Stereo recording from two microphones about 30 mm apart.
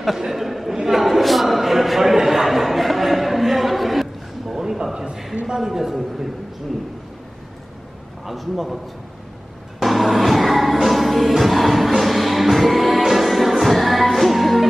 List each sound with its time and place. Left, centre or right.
0.2 s speech: centre
0.8 s a sound: centre
4.6 s a sound: right
5.3 s a man's voice: right
5.6 s a man's voice: centre
8.3 s a man's voice: centre
9.8 s music: centre